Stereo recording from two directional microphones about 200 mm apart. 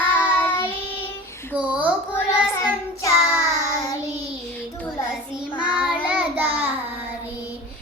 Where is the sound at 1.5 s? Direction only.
5° right (ahead or behind).